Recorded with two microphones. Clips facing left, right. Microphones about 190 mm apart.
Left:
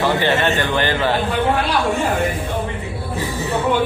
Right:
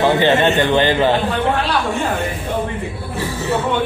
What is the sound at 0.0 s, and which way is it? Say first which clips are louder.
A man's voice: right 4 dB; 20° right (ahead or behind).